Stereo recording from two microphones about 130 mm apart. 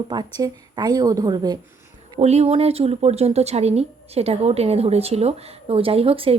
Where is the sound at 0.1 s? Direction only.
30° right (ahead or behind).